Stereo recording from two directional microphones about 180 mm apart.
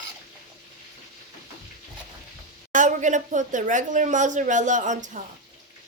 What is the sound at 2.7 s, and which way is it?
Speech, 45° right (ahead or behind).